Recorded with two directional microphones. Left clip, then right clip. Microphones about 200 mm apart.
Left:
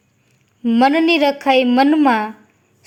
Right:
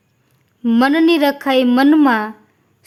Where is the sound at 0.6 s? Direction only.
20° right (ahead or behind).